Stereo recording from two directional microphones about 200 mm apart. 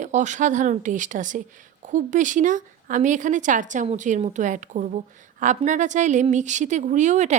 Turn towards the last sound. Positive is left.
turn(degrees=-35)  # may be behind; listen again after turning